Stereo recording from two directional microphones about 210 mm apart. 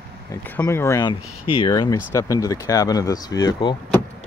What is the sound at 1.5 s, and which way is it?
Speech, 25° left (ahead or behind).